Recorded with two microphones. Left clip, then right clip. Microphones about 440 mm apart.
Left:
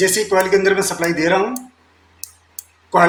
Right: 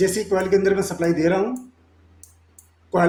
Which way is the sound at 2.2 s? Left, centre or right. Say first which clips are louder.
Left 16 dB; right.